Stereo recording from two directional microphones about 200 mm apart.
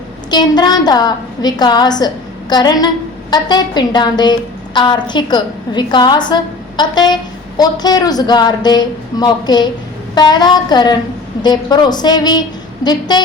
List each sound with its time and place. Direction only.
0.3 s a woman's voice: 20° left (ahead or behind)